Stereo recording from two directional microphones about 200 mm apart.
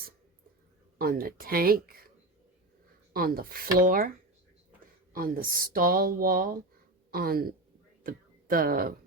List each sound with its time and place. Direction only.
0.9 s speech: 45° right (ahead or behind)
5.1 s speech: 45° right (ahead or behind)